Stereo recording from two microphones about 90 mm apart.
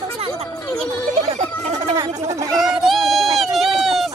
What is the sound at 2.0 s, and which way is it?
Speech, 40° right (ahead or behind).